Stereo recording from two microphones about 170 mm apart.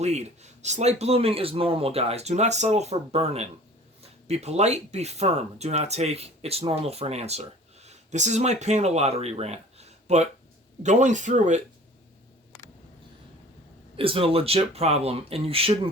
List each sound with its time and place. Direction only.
0.0 s speech: 40° right (ahead or behind)
13.9 s speech: 35° right (ahead or behind)